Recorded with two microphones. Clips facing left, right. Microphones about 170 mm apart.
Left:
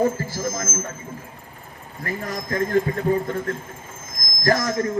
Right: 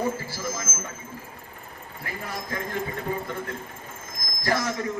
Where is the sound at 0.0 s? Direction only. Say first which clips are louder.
Left 6 dB; 45° left (ahead or behind).